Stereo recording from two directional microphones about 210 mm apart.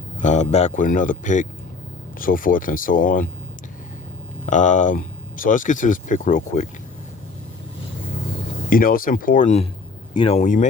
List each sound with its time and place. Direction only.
0.2 s speech: 35° left (ahead or behind)
4.4 s speech: 35° left (ahead or behind)
8.7 s speech: 45° left (ahead or behind)